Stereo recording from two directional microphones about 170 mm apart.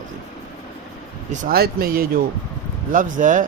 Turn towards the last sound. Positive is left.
turn(degrees=-50)  # may be behind; listen again after turning